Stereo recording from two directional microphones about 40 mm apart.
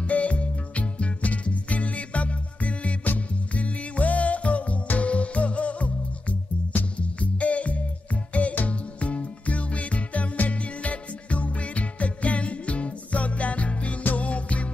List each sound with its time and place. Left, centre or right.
0.0 s music: left